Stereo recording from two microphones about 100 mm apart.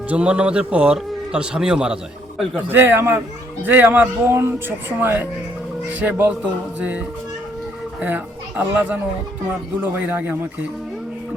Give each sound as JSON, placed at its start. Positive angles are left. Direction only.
{"t": 0.1, "sound": "a man's voice", "side_deg": -10}
{"t": 2.7, "sound": "a man's voice", "side_deg": -20}
{"t": 8.0, "sound": "a man's voice", "side_deg": -20}